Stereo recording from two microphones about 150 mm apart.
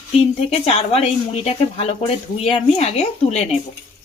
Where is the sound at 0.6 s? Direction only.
45° left (ahead or behind).